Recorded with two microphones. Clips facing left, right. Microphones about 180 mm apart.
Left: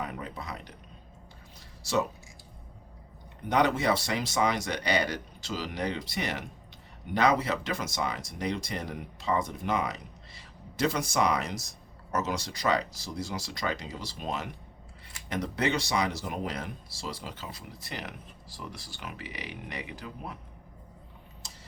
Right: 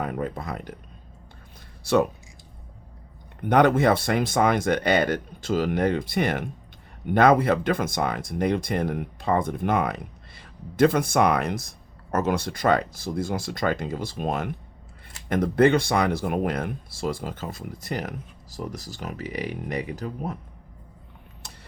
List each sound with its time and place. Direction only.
0.0 s speech: 50° right (ahead or behind)
1.8 s speech: 55° right (ahead or behind)
3.5 s speech: 55° right (ahead or behind)
21.4 s a sound: 60° right (ahead or behind)